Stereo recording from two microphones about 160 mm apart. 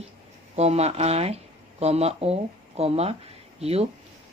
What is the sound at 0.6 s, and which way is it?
Speech, 40° right (ahead or behind).